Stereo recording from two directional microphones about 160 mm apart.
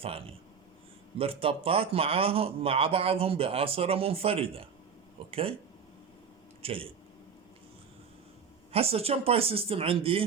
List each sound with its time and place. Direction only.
0.0 s speech: 35° right (ahead or behind)
6.6 s speech: 35° right (ahead or behind)
8.7 s speech: 40° right (ahead or behind)